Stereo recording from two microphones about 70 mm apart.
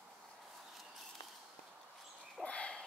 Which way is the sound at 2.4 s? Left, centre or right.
Centre.